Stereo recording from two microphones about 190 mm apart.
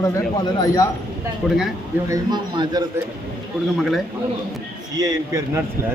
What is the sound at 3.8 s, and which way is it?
Speech, centre (ahead or behind).